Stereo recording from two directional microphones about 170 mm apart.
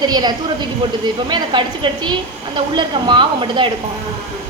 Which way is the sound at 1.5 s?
25° right (ahead or behind).